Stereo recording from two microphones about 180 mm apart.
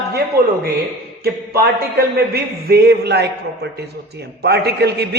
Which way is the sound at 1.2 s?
60° right (ahead or behind).